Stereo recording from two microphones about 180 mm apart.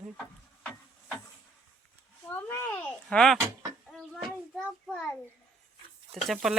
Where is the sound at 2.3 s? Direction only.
10° left (ahead or behind).